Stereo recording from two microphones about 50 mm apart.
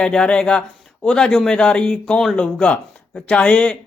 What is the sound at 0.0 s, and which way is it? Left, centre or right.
A man's voice, centre.